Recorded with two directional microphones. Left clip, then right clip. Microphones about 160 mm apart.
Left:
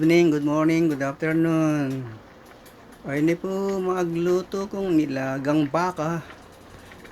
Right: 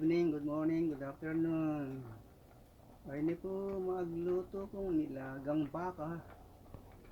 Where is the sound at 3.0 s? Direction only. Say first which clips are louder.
Left 15 dB; 60° left (ahead or behind).